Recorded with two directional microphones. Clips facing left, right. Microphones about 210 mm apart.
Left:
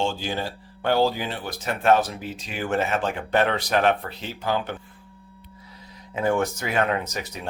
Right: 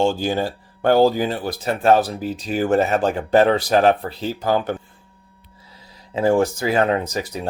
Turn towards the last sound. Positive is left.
turn(degrees=-35)  # may be behind; listen again after turning